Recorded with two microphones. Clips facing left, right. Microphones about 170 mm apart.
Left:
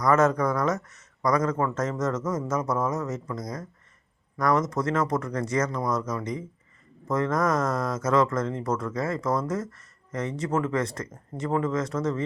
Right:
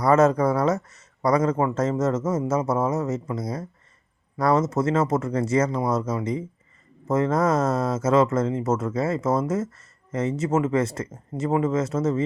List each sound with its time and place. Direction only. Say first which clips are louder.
0.0 s speech: right 4 dB; 30° right (ahead or behind)
4.4 s speech: right 3 dB; 25° right (ahead or behind)